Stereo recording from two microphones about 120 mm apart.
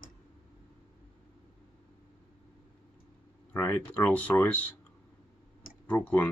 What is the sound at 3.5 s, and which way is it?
Speech, 15° left (ahead or behind).